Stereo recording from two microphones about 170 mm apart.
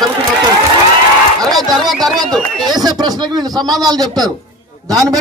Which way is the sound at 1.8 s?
Centre (ahead or behind).